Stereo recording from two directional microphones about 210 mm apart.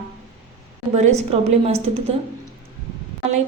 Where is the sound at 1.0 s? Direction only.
30° right (ahead or behind).